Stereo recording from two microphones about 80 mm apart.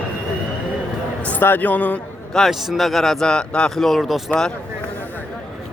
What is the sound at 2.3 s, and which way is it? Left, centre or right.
A man's voice, centre.